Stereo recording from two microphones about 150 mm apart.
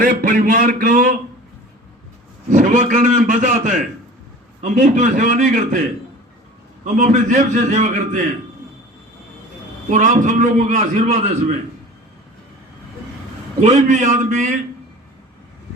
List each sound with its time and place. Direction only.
0.0 s speech: 65° right (ahead or behind)
2.5 s a man's voice: 55° right (ahead or behind)
6.8 s a man's voice: 55° right (ahead or behind)
9.9 s a man's voice: 60° right (ahead or behind)
13.6 s a man's voice: 50° right (ahead or behind)